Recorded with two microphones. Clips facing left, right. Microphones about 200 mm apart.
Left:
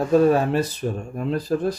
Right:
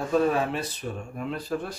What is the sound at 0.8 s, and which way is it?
Speech, 45° left (ahead or behind).